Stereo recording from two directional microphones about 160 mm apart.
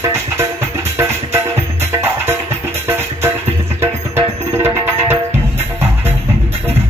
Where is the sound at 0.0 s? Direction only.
15° right (ahead or behind).